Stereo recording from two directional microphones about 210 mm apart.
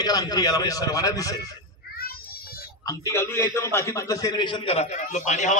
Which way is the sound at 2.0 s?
45° left (ahead or behind).